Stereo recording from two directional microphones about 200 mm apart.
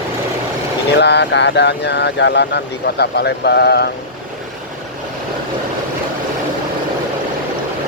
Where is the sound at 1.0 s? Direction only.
60° left (ahead or behind).